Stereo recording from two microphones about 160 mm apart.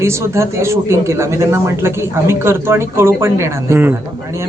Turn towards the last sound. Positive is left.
turn(degrees=-15)  # may be behind; listen again after turning